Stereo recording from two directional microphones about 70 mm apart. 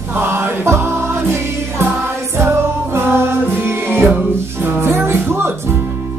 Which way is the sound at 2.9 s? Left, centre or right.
Right.